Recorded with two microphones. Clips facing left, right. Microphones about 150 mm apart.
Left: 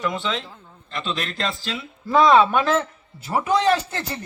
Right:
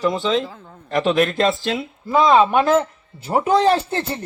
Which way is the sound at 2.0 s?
5° right (ahead or behind).